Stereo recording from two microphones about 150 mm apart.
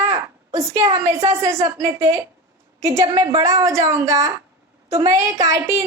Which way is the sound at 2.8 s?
20° right (ahead or behind).